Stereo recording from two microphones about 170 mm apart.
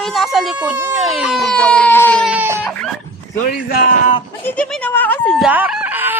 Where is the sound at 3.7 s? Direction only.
65° left (ahead or behind).